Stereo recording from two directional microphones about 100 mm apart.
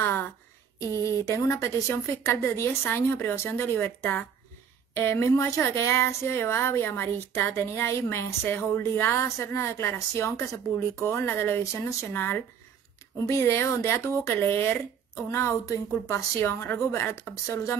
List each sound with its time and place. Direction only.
0.7 s speech: 30° left (ahead or behind)